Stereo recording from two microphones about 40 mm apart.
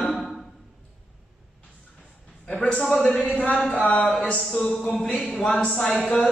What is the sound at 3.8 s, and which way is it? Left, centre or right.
Speech, left.